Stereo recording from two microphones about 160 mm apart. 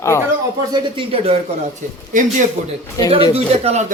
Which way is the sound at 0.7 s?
30° right (ahead or behind).